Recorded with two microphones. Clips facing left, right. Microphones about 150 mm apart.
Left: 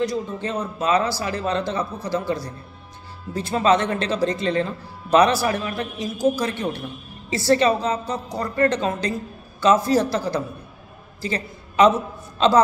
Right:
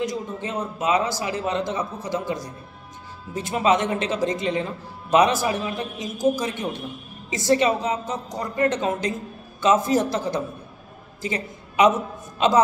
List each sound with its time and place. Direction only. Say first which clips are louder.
0.0 s a woman's voice: left 3 dB; 15° right (ahead or behind)